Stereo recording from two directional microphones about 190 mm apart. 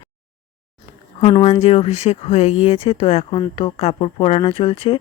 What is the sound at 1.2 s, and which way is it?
Speech, 30° left (ahead or behind).